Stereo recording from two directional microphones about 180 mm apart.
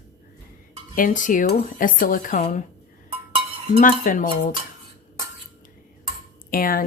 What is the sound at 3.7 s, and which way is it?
Speech, 50° left (ahead or behind).